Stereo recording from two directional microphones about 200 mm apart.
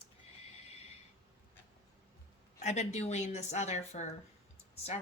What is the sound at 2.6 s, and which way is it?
A woman's voice, 35° left (ahead or behind).